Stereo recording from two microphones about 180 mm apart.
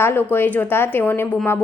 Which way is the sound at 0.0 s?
10° left (ahead or behind).